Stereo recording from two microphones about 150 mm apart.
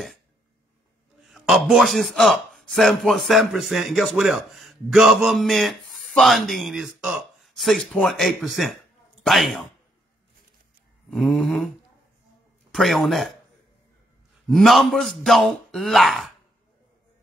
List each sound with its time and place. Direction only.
1.2 s a man's voice: centre (ahead or behind)
11.1 s a man's voice: centre (ahead or behind)
12.7 s a man's voice: centre (ahead or behind)
14.5 s a man's voice: centre (ahead or behind)